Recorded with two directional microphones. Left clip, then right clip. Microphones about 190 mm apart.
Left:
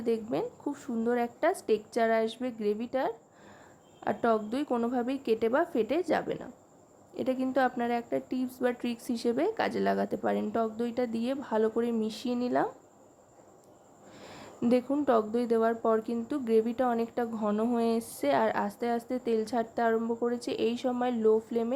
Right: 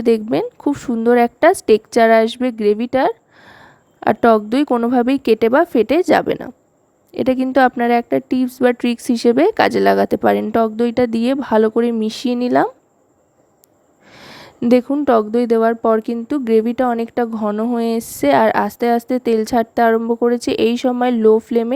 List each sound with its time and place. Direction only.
0.0 s speech: 50° right (ahead or behind)
14.1 s a sound: 45° right (ahead or behind)
14.7 s speech: 45° right (ahead or behind)
17.7 s speech: 45° right (ahead or behind)